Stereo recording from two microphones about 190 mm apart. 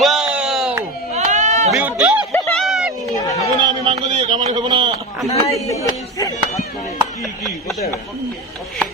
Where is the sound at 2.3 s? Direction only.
15° left (ahead or behind).